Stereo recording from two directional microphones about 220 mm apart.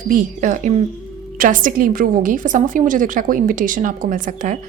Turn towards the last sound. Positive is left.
turn(degrees=-35)  # may be behind; listen again after turning